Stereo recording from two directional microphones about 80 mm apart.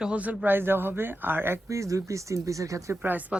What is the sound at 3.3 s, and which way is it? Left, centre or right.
Speech, centre.